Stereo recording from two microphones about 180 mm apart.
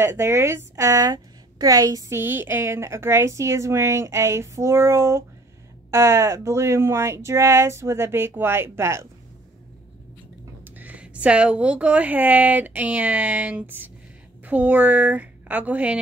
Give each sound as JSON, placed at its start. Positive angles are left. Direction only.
{"t": 0.0, "sound": "a woman's voice", "side_deg": -15}
{"t": 10.6, "sound": "a woman's voice", "side_deg": -10}